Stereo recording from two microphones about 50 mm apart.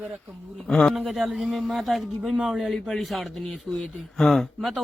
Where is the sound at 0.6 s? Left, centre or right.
Centre.